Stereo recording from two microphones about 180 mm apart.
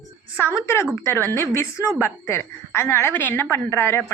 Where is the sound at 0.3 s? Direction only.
15° left (ahead or behind).